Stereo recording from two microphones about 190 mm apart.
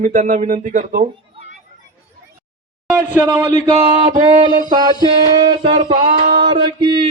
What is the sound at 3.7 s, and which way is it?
A man's voice, 30° right (ahead or behind).